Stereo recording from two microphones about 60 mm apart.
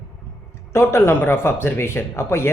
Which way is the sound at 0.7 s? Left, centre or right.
Left.